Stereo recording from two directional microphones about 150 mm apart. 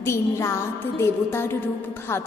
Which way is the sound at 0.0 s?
20° left (ahead or behind).